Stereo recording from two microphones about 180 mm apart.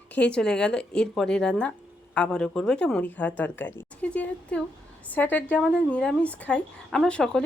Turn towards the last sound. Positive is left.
turn(degrees=5)  # may be behind; listen again after turning